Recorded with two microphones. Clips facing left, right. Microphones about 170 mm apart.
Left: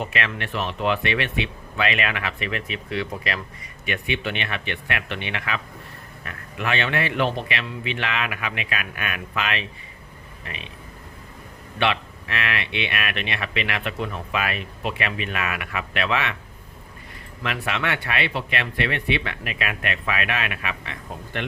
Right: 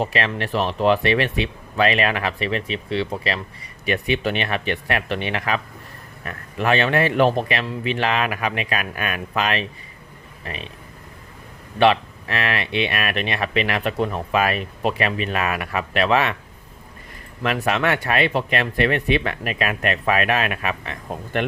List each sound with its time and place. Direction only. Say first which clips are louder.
0.0 s speech: right 5 dB; 35° right (ahead or behind)
11.8 s speech: right 7 dB; 40° right (ahead or behind)
17.4 s speech: right 6 dB; 40° right (ahead or behind)